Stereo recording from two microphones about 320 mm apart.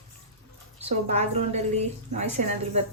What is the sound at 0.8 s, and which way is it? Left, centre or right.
A woman's voice, centre.